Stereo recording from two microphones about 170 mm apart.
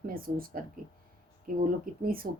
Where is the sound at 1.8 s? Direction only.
55° right (ahead or behind).